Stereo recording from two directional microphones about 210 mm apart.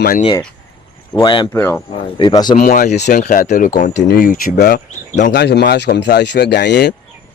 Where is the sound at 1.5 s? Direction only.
10° left (ahead or behind).